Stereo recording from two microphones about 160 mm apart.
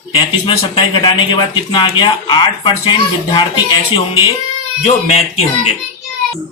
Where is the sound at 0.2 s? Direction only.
35° left (ahead or behind).